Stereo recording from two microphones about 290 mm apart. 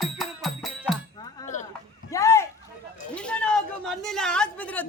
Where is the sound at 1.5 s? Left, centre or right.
Left.